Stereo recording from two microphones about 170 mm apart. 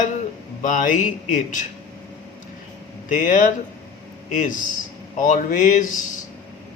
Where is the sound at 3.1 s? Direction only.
50° left (ahead or behind).